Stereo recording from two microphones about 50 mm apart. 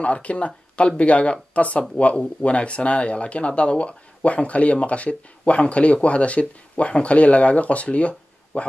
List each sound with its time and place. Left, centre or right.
0.0 s speech: left